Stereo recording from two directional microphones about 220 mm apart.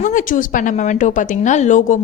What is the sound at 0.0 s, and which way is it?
A woman's voice, 35° left (ahead or behind).